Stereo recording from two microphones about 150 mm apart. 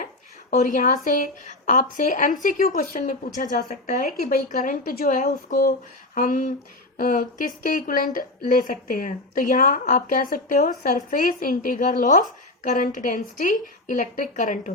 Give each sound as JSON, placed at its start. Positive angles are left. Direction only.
{"t": 0.5, "sound": "a woman's voice", "side_deg": 60}
{"t": 6.1, "sound": "a woman's voice", "side_deg": 65}